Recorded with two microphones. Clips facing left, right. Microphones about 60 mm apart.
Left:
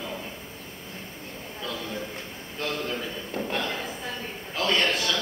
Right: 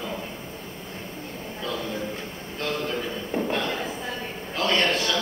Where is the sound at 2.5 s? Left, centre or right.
Centre.